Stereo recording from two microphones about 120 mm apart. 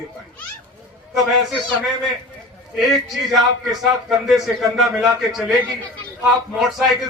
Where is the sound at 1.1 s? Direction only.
Centre (ahead or behind).